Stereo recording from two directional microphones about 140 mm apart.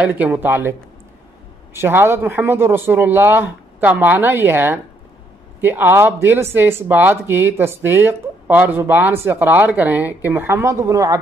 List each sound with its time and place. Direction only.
0.0 s speech: 10° right (ahead or behind)